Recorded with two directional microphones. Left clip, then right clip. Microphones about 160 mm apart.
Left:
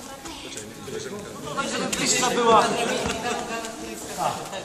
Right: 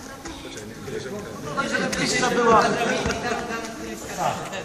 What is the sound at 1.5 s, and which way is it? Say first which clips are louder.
Speech: right 3 dB; 15° right (ahead or behind).